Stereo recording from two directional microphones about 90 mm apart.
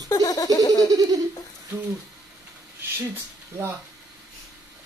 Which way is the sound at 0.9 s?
45° right (ahead or behind).